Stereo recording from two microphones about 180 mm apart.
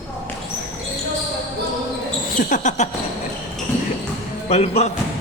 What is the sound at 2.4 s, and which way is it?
Basketball bounce, 45° left (ahead or behind).